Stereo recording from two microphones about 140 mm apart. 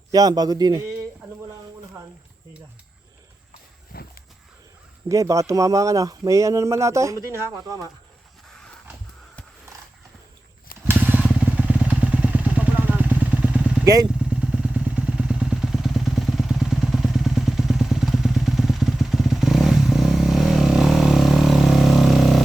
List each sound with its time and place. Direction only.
0.1 s speech: 25° right (ahead or behind)
3.9 s walk: 90° left
5.0 s speech: 25° right (ahead or behind)
8.4 s a sound: 5° left (ahead or behind)
10.8 s vehicle: 15° right (ahead or behind)
13.8 s speech: 25° right (ahead or behind)
14.2 s vehicle: 5° right (ahead or behind)